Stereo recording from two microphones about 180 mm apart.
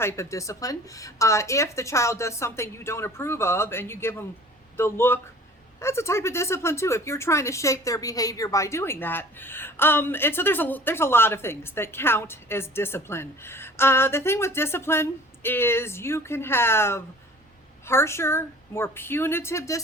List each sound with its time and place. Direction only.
0.0 s a woman's voice: 15° left (ahead or behind)